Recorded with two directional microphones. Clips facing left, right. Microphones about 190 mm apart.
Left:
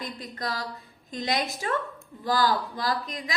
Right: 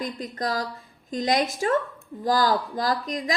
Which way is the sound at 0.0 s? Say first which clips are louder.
Right 5 dB; 45° right (ahead or behind).